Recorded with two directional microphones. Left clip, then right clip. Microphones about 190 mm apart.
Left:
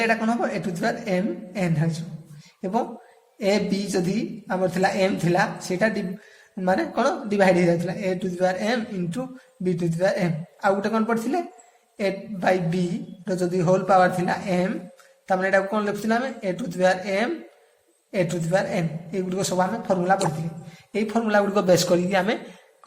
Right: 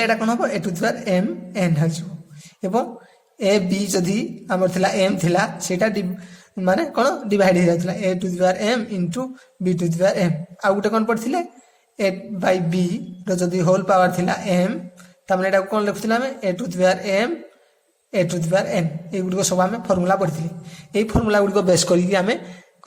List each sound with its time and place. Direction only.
0.0 s a woman's voice: 30° right (ahead or behind)